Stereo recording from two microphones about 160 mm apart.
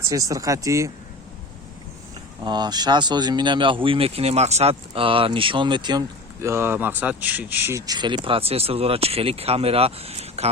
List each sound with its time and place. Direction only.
0.1 s speech: 20° right (ahead or behind)
2.4 s speech: 25° right (ahead or behind)